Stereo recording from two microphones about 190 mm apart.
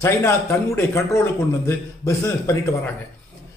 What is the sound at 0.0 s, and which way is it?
A man's voice, 15° left (ahead or behind).